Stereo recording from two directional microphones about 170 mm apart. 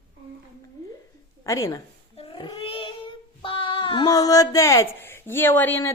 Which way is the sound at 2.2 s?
30° left (ahead or behind).